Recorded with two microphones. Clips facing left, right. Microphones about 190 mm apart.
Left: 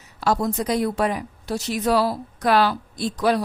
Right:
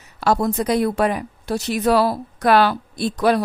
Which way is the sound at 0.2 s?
60° right (ahead or behind).